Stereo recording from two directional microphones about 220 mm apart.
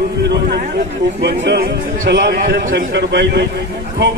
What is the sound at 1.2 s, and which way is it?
A man's voice, 50° right (ahead or behind).